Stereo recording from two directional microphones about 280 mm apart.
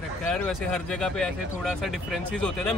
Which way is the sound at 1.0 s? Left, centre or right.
Centre.